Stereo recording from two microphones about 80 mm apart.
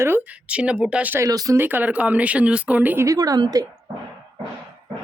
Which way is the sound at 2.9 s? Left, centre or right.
Right.